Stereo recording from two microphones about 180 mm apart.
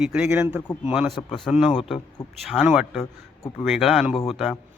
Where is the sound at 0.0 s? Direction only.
5° right (ahead or behind).